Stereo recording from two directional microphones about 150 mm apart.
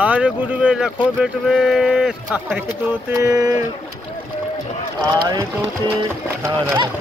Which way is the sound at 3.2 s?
20° right (ahead or behind).